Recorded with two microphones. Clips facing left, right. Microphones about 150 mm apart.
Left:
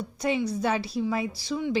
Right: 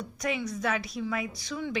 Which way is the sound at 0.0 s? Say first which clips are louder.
Left 5 dB; 30° left (ahead or behind).